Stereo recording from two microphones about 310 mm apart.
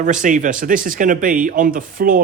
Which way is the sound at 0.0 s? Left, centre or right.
Right.